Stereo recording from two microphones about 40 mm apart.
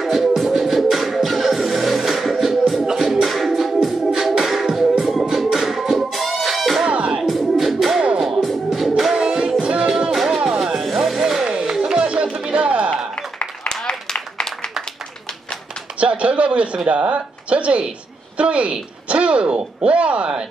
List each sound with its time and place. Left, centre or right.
0.0 s music: centre
6.9 s music: right
7.2 s music: centre
9.1 s music: centre
10.1 s music: centre
11.4 s a sound: right
11.8 s music: right
13.7 s a sound: left
16.0 s a sound: right